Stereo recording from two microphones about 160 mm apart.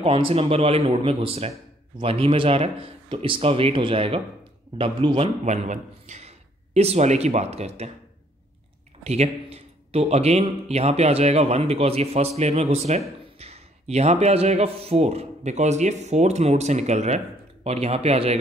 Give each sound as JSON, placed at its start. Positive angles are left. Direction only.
{"t": 0.0, "sound": "a man's voice", "side_deg": -35}
{"t": 5.4, "sound": "a man's voice", "side_deg": -45}
{"t": 9.0, "sound": "a man's voice", "side_deg": -40}